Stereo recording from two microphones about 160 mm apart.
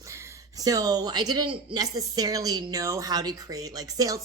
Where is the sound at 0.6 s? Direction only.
25° right (ahead or behind).